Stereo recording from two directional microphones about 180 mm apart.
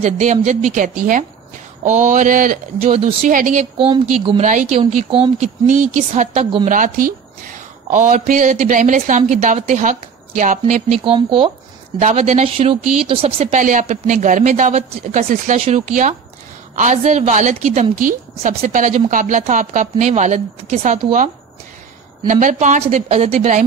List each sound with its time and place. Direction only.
0.0 s a woman's voice: 40° right (ahead or behind)
2.8 s speech: 35° right (ahead or behind)
3.3 s a woman's voice: 45° right (ahead or behind)
3.7 s speech: 30° right (ahead or behind)
4.5 s a woman's voice: 45° right (ahead or behind)
4.7 s a woman's voice: 35° right (ahead or behind)
11.1 s speech: 30° right (ahead or behind)
12.0 s a woman's voice: 40° right (ahead or behind)
22.3 s speech: 45° right (ahead or behind)